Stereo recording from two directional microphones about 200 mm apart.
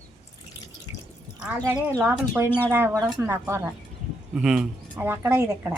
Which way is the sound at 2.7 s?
15° right (ahead or behind).